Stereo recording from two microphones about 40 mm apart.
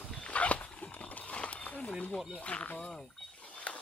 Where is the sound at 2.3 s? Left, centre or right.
Left.